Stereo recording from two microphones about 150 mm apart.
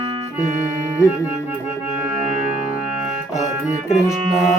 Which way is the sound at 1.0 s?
20° left (ahead or behind).